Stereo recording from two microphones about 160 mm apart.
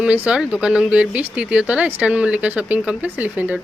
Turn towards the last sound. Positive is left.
turn(degrees=-10)  # may be behind; listen again after turning